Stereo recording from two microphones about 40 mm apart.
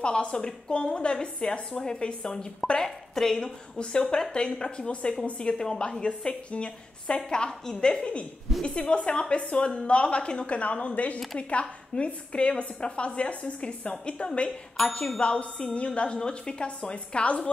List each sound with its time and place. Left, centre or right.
0.0 s a woman's voice: left
5.4 s a woman's voice: centre
8.0 s a woman's voice: left
16.2 s a woman's voice: centre